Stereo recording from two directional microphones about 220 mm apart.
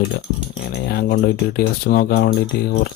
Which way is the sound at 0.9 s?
50° left (ahead or behind).